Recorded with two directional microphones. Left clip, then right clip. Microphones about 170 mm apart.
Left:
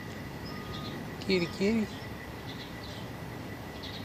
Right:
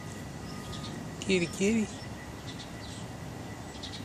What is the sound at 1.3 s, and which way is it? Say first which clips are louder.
Speech: right 1 dB; 5° right (ahead or behind).